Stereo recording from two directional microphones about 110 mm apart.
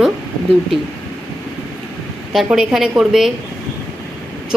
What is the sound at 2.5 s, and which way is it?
Speech, 5° right (ahead or behind).